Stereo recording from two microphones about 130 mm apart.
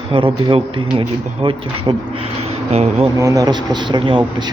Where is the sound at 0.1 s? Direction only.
45° right (ahead or behind).